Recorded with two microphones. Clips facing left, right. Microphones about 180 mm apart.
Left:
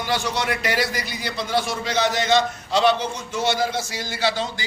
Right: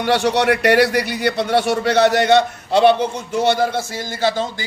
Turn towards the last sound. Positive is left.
turn(degrees=-50)  # may be behind; listen again after turning